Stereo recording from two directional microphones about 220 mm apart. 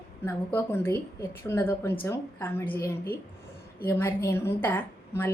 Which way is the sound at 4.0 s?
10° left (ahead or behind).